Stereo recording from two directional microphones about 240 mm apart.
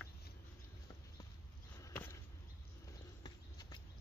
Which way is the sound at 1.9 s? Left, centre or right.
Centre.